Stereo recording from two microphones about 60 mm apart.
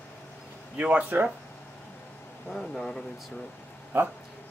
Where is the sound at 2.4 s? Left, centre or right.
Centre.